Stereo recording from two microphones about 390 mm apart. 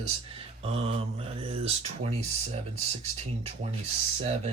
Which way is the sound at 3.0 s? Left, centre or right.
Centre.